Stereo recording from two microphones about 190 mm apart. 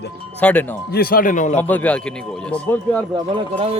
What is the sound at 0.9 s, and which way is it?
Speech, 50° left (ahead or behind).